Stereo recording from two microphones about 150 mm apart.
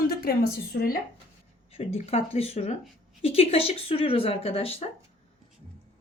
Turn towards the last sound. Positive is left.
turn(degrees=40)  # may be behind; listen again after turning